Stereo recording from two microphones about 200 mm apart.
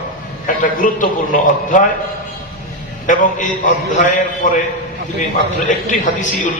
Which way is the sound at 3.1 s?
40° left (ahead or behind).